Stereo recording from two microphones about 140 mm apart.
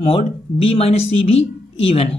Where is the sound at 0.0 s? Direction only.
45° left (ahead or behind).